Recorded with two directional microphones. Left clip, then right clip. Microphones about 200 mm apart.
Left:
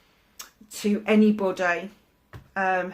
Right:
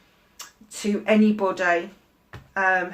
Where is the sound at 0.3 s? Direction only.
45° left (ahead or behind).